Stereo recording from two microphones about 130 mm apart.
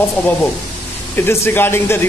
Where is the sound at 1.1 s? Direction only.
15° left (ahead or behind).